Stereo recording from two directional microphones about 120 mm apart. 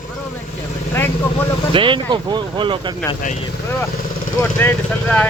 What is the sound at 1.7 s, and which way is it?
Speech, 45° right (ahead or behind).